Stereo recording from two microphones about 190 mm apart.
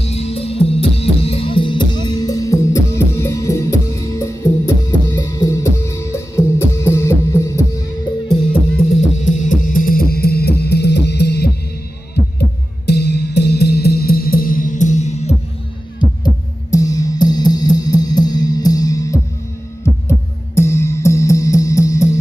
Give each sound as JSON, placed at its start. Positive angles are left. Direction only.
{"t": 0.0, "sound": "music", "side_deg": 35}
{"t": 9.2, "sound": "music", "side_deg": 45}
{"t": 16.7, "sound": "music", "side_deg": 20}